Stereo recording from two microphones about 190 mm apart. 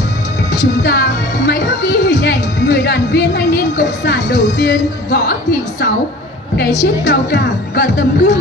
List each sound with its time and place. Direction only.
0.5 s speech: 65° left (ahead or behind)
6.6 s speech: 65° left (ahead or behind)